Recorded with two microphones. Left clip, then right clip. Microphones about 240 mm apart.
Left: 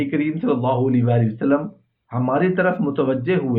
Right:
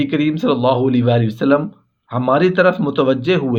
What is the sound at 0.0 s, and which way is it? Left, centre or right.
Speech, right.